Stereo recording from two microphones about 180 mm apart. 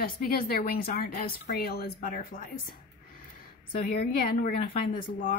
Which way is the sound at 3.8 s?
50° left (ahead or behind).